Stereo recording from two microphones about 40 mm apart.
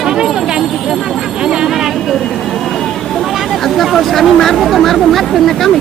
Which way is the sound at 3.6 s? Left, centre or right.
Centre.